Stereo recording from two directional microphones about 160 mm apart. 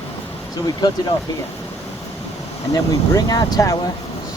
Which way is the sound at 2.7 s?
25° left (ahead or behind).